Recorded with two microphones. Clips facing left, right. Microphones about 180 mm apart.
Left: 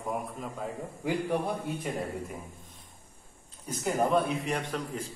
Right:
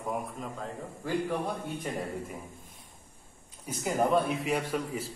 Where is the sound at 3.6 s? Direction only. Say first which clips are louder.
Even; 5° right (ahead or behind).